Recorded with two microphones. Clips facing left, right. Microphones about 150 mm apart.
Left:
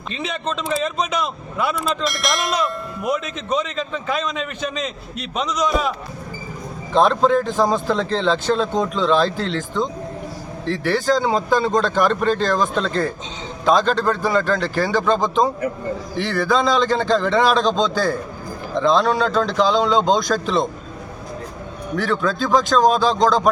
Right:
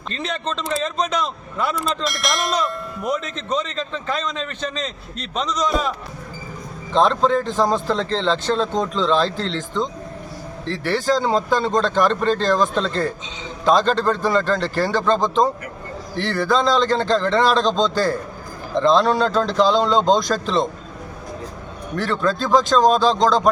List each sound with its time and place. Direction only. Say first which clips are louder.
0.1 s speech: left 1 dB; 5° left (ahead or behind)
6.9 s speech: left 1 dB; 5° left (ahead or behind)
21.9 s speech: even; centre (ahead or behind)